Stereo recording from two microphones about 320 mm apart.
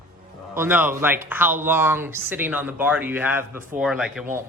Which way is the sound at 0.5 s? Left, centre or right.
Centre.